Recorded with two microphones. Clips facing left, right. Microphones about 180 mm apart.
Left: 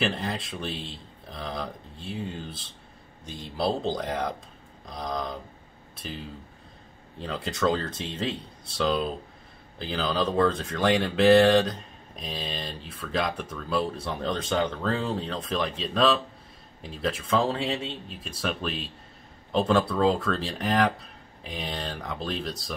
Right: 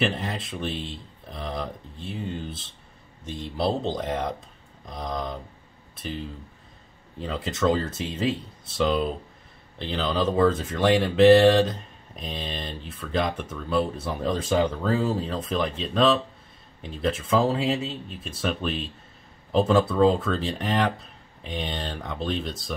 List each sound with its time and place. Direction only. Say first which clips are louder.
0.0 s speech: right 2 dB; centre (ahead or behind)
7.2 s speech: right 2 dB; centre (ahead or behind)